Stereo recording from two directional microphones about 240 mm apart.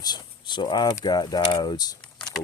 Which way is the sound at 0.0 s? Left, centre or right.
Centre.